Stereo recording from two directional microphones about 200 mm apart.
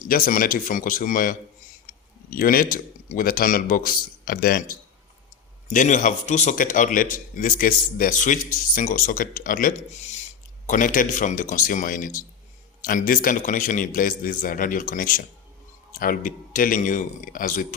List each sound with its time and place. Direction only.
0.1 s a man's voice: 45° left (ahead or behind)
5.6 s a man's voice: 40° left (ahead or behind)